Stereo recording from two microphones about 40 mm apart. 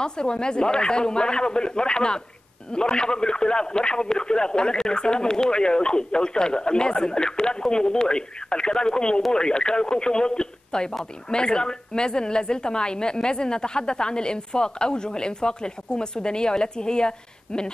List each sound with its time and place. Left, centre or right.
0.0 s speech: left